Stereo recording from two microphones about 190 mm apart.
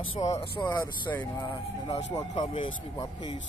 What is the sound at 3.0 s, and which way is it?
Speech, 25° left (ahead or behind).